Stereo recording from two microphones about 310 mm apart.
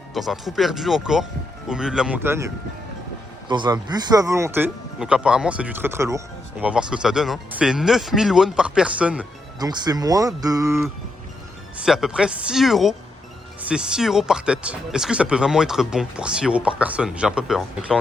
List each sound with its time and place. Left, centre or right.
0.1 s speech: centre
3.5 s speech: centre